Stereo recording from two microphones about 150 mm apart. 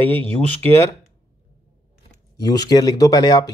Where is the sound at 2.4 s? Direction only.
25° left (ahead or behind).